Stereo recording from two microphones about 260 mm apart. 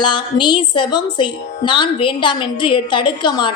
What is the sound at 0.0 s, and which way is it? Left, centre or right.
A woman's voice, centre.